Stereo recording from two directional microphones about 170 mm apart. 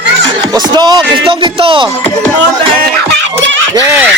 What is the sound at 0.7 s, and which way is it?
Speech, 25° right (ahead or behind).